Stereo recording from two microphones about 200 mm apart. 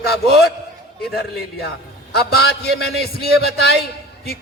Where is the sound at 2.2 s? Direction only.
55° left (ahead or behind).